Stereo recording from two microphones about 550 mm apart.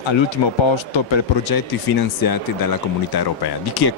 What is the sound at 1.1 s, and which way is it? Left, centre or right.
Speech, left.